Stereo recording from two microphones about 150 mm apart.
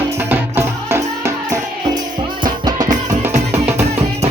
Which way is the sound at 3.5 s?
15° right (ahead or behind).